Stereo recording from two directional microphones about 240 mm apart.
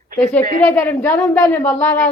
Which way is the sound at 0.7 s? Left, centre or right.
Centre.